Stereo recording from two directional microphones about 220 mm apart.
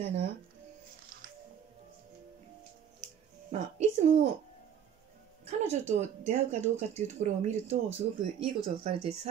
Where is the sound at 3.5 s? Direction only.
30° right (ahead or behind).